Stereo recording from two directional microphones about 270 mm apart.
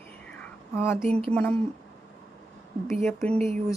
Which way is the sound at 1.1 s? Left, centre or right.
Right.